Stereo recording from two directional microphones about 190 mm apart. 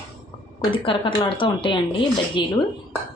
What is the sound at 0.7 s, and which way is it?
Speech, 25° left (ahead or behind).